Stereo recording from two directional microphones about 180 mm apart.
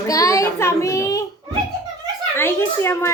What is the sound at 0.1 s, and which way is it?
Child singing, 20° left (ahead or behind).